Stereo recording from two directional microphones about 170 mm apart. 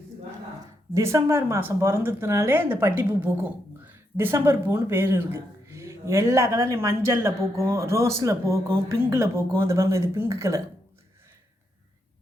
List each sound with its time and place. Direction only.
0.9 s a woman's voice: 15° right (ahead or behind)